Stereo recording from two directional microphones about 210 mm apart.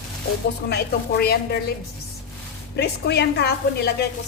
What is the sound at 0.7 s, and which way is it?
Speech, 50° left (ahead or behind).